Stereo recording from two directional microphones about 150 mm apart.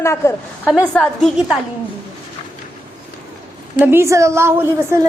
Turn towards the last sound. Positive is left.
turn(degrees=-15)  # may be behind; listen again after turning